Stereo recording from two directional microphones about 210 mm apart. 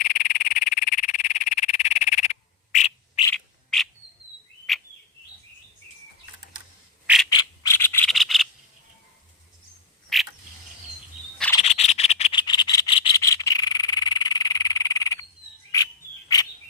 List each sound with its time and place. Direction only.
0.0 s frog: 40° left (ahead or behind)
3.2 s bird: 5° left (ahead or behind)
7.3 s a sound: 20° left (ahead or behind)
8.1 s a sound: centre (ahead or behind)
10.1 s mechanisms: centre (ahead or behind)
11.6 s frog: 30° left (ahead or behind)
16.3 s bird: 15° left (ahead or behind)